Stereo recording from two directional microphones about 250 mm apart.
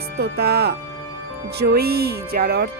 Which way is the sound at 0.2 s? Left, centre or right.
Right.